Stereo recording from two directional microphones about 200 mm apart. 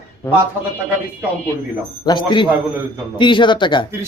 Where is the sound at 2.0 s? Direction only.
25° left (ahead or behind).